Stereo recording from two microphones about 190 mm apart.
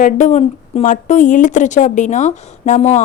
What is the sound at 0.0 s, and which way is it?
Speech, 40° left (ahead or behind).